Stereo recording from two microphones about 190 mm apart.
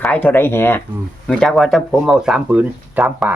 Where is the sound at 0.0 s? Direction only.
10° left (ahead or behind).